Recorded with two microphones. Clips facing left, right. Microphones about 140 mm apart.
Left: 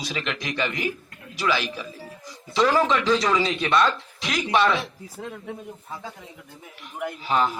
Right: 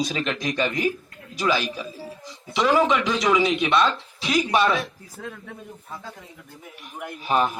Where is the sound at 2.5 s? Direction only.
15° right (ahead or behind).